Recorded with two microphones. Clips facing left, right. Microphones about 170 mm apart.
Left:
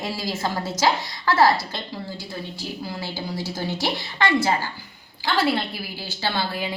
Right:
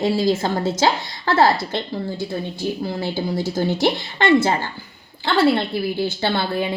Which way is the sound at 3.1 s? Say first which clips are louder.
Right 7 dB; 50° right (ahead or behind).